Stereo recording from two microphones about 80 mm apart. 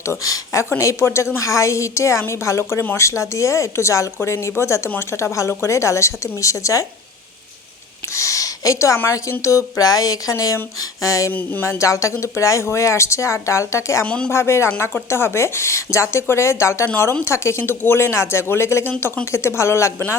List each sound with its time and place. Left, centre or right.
0.0 s speech: left
8.1 s a sound: left
9.0 s speech: left
11.3 s a sound: left
11.6 s speech: left
14.0 s speech: centre
14.3 s speech: left